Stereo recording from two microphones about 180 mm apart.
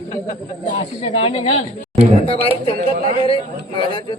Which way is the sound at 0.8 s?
35° left (ahead or behind).